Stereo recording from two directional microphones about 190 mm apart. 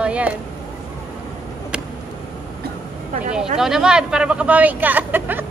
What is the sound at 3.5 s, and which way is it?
Speech, 5° right (ahead or behind).